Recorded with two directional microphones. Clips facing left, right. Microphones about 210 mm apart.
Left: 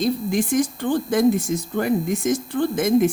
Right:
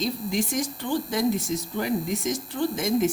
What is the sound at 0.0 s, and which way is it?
Speech, 55° left (ahead or behind).